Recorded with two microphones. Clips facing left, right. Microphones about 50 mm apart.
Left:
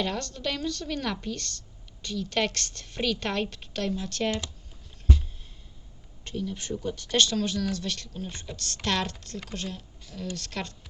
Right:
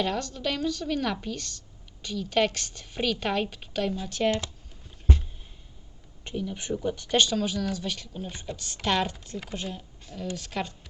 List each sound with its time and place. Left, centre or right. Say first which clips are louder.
0.0 s speech: right 2 dB; centre
5.1 s a sound: even; right
6.2 s speech: right 1 dB; centre